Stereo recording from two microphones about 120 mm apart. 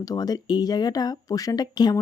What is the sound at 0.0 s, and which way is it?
Speech, 30° left (ahead or behind).